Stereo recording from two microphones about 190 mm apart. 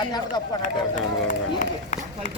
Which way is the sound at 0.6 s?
40° left (ahead or behind).